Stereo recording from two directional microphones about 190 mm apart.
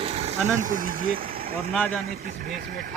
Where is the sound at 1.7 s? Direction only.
5° left (ahead or behind).